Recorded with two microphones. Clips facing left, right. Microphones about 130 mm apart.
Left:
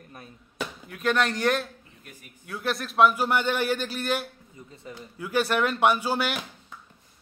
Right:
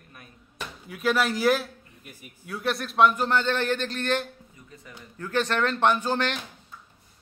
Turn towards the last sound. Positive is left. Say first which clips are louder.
# even
turn(degrees=10)  # may be behind; listen again after turning